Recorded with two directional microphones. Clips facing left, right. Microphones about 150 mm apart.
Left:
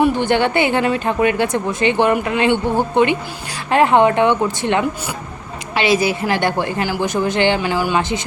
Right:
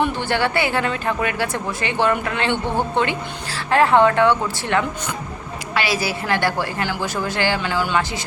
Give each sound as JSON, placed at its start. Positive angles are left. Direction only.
{"t": 0.0, "sound": "a woman's voice", "side_deg": 20}